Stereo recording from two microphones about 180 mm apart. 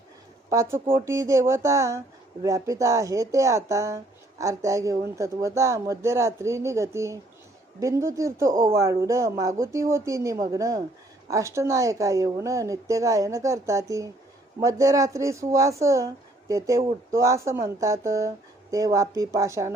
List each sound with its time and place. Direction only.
0.5 s speech: 15° right (ahead or behind)